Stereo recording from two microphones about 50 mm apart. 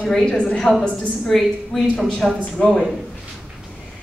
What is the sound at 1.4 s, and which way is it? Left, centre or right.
A woman's voice, centre.